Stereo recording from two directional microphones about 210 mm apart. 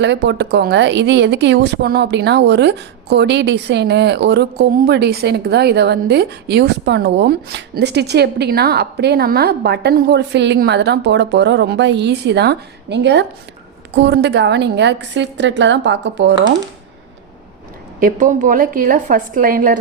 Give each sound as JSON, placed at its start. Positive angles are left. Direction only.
{"t": 0.0, "sound": "a woman's voice", "side_deg": -55}
{"t": 18.0, "sound": "a woman's voice", "side_deg": -40}